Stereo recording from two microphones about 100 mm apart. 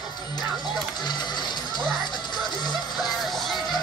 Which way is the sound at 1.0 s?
45° left (ahead or behind).